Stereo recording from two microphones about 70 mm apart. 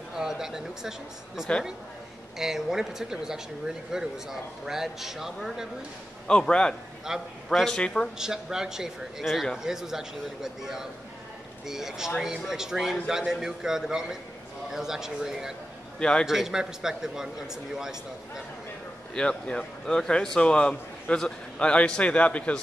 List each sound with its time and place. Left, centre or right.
0.1 s a man's voice: centre
6.2 s a man's voice: centre
7.1 s a man's voice: centre
7.4 s a man's voice: centre
8.2 s a man's voice: centre
16.0 s a man's voice: centre
16.3 s a man's voice: centre
19.1 s a man's voice: centre